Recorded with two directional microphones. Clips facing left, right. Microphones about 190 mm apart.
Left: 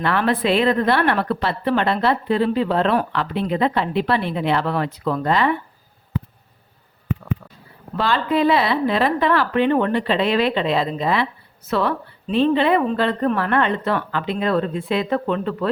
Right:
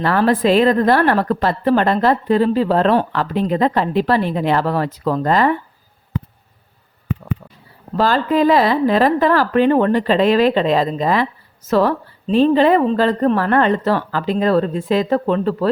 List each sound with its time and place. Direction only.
0.0 s a woman's voice: 40° right (ahead or behind)
7.9 s a woman's voice: 40° right (ahead or behind)